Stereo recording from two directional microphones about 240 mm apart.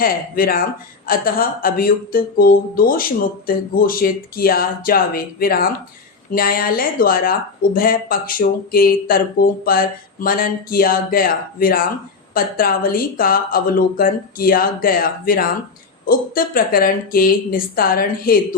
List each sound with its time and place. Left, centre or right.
0.0 s speech: left